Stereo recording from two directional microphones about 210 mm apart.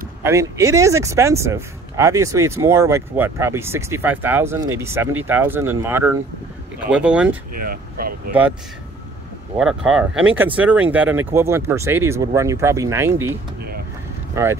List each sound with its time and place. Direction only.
0.2 s speech: 15° right (ahead or behind)
7.5 s speech: 45° right (ahead or behind)
8.3 s speech: 5° right (ahead or behind)
9.6 s speech: 5° right (ahead or behind)